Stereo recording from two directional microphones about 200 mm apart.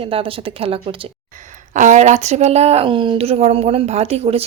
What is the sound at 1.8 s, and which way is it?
Speech, 35° right (ahead or behind).